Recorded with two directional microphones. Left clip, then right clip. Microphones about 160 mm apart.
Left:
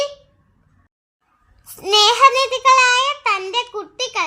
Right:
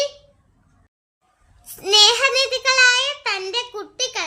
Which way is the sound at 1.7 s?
20° left (ahead or behind).